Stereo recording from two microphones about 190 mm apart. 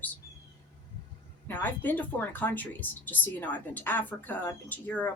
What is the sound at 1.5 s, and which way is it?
A woman's voice, 10° left (ahead or behind).